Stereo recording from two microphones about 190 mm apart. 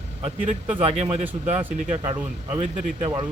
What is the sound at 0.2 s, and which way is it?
Speech, 35° right (ahead or behind).